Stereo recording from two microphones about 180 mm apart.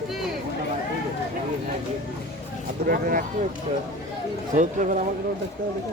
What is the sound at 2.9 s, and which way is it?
Speech, 50° right (ahead or behind).